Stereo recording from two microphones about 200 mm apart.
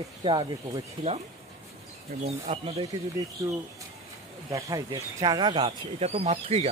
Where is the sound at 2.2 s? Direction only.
30° right (ahead or behind).